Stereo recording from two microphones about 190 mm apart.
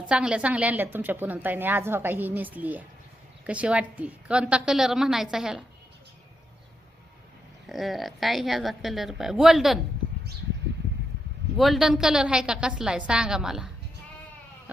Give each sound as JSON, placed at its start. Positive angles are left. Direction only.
{"t": 0.1, "sound": "a woman's voice", "side_deg": -5}
{"t": 7.7, "sound": "a woman's voice", "side_deg": 0}
{"t": 11.5, "sound": "a woman's voice", "side_deg": 0}